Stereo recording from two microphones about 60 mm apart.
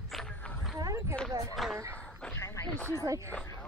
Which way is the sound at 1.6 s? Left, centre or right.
Centre.